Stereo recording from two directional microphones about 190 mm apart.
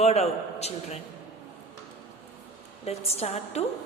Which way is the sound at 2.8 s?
35° left (ahead or behind).